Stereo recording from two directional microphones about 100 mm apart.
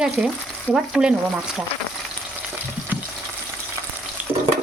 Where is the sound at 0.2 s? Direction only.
5° right (ahead or behind).